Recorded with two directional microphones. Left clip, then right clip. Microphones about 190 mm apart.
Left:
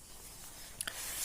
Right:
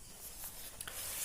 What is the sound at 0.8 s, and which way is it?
Writing, 45° left (ahead or behind).